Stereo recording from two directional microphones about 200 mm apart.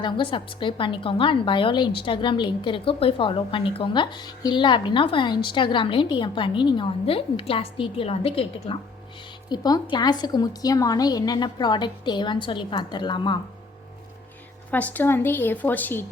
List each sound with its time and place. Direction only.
0.0 s a woman's voice: 25° left (ahead or behind)
14.7 s a woman's voice: 10° left (ahead or behind)